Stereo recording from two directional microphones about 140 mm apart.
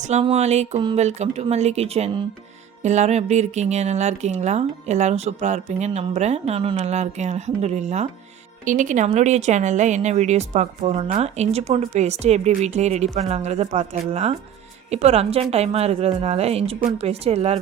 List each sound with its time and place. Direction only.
0.0 s speech: 50° right (ahead or behind)
8.6 s speech: 65° right (ahead or behind); by 17.6 s 45° right (ahead or behind)